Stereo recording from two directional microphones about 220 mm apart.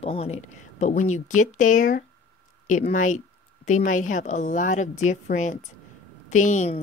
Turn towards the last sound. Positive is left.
turn(degrees=35)  # may be behind; listen again after turning